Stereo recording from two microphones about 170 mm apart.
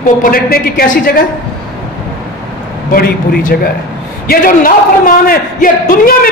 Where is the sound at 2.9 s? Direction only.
60° left (ahead or behind).